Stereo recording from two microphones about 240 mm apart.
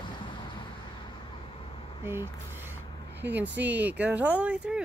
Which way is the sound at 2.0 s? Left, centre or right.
Centre.